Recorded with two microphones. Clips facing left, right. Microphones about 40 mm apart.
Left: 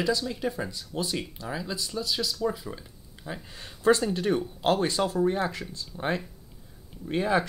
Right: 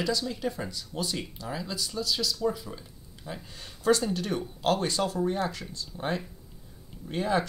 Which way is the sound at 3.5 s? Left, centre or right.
Left.